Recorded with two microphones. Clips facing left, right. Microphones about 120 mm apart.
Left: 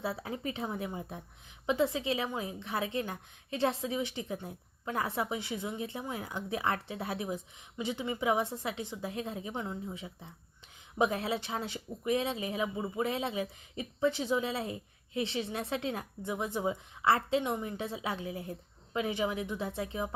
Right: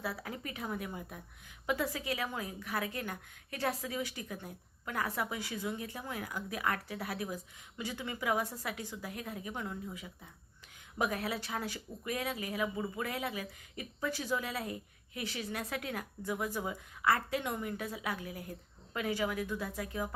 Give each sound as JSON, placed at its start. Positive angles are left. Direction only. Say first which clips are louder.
{"t": 0.0, "sound": "a woman's voice", "louder": "left 4 dB", "side_deg": 25}